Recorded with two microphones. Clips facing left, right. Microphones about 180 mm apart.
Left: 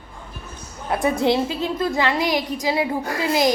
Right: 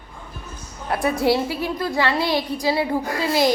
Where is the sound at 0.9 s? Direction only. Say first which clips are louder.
Even; 20° left (ahead or behind).